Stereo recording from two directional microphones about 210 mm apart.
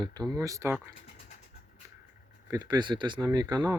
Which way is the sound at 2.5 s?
20° right (ahead or behind).